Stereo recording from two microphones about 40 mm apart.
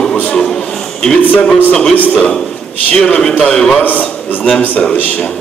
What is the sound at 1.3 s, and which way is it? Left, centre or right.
Speech, left.